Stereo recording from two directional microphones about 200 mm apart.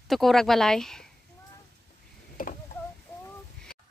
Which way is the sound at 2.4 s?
45° left (ahead or behind).